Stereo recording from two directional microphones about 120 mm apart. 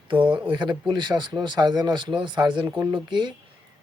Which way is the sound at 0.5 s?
40° right (ahead or behind).